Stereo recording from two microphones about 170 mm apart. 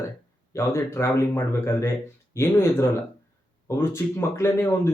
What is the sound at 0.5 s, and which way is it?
Speech, 15° left (ahead or behind).